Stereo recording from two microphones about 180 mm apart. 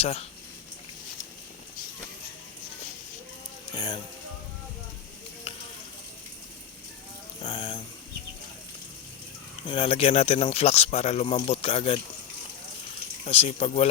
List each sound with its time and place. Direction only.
0.0 s speech: 35° left (ahead or behind)
3.8 s speech: 25° left (ahead or behind)
5.5 s a sound: 30° left (ahead or behind)
7.4 s speech: 25° left (ahead or behind)
9.6 s speech: 30° left (ahead or behind)
13.2 s speech: 35° left (ahead or behind)